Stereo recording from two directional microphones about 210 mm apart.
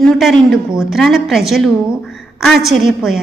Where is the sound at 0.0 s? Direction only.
Centre (ahead or behind).